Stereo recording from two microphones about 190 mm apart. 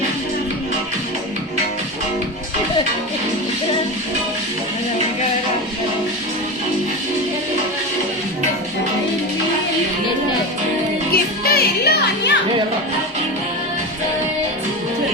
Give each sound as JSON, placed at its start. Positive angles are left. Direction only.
{"t": 11.1, "sound": "music", "side_deg": 55}